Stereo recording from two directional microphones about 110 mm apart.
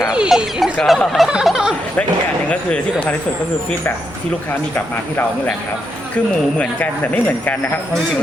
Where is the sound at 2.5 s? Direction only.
10° left (ahead or behind).